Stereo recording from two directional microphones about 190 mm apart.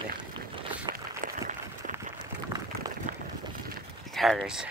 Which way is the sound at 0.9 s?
20° right (ahead or behind).